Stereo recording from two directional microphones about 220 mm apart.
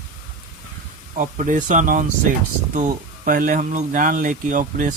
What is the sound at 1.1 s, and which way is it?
Speech, 35° right (ahead or behind).